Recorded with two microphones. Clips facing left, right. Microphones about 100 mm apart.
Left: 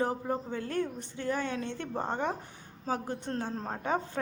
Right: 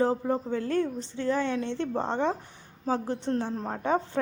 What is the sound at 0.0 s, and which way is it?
A woman's voice, 25° right (ahead or behind).